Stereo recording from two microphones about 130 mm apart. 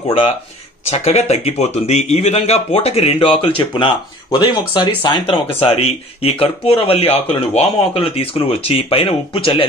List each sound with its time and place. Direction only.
0.8 s speech: 55° left (ahead or behind)